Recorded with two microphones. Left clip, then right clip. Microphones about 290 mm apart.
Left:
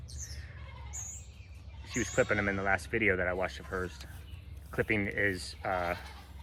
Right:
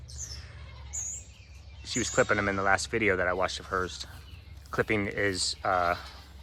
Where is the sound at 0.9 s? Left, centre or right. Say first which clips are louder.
Right 7 dB; left.